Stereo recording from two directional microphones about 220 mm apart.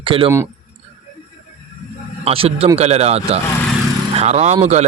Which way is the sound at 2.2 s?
25° right (ahead or behind).